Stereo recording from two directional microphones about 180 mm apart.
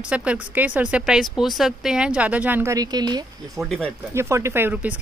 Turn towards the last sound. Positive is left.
turn(degrees=-10)  # may be behind; listen again after turning